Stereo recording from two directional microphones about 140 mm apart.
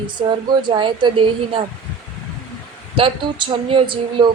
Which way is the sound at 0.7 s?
35° right (ahead or behind).